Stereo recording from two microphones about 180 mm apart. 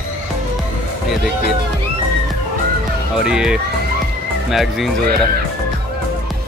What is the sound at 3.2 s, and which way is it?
Speech, 5° right (ahead or behind).